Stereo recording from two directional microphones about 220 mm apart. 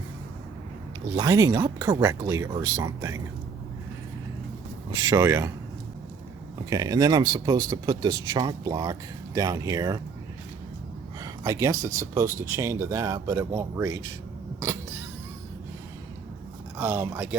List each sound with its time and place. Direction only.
1.1 s speech: 15° right (ahead or behind)
5.0 s speech: 15° right (ahead or behind)
6.7 s speech: 15° right (ahead or behind)
11.2 s speech: 15° right (ahead or behind)
16.7 s speech: 10° right (ahead or behind)